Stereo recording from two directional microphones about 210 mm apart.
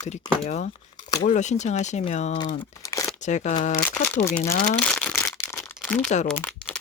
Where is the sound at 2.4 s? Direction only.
15° left (ahead or behind).